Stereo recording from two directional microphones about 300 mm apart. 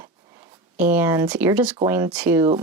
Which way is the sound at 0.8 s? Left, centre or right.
Centre.